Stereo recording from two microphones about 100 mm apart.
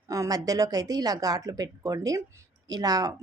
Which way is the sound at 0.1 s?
35° right (ahead or behind).